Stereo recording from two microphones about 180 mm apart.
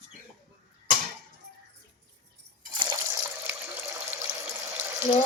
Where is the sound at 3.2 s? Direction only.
15° right (ahead or behind).